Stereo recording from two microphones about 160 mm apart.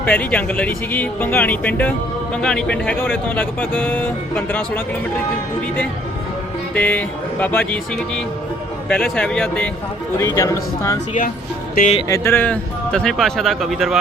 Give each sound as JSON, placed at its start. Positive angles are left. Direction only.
{"t": 0.0, "sound": "speech", "side_deg": 10}
{"t": 6.7, "sound": "speech", "side_deg": 10}
{"t": 10.2, "sound": "speech", "side_deg": 20}
{"t": 12.0, "sound": "speech", "side_deg": 20}